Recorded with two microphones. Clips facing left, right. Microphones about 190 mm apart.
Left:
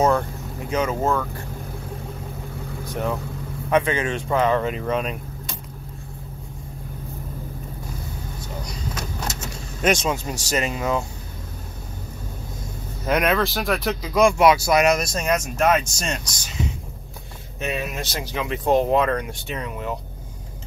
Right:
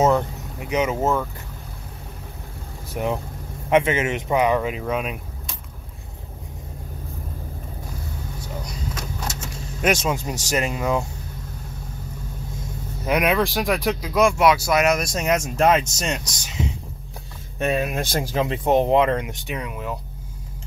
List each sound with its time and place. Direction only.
0.0 s speech: 20° right (ahead or behind)
2.9 s speech: 10° right (ahead or behind)
9.8 s speech: 10° right (ahead or behind)
13.0 s speech: 5° right (ahead or behind)
17.6 s speech: 55° right (ahead or behind)
18.3 s speech: 35° right (ahead or behind)
18.7 s speech: 20° right (ahead or behind)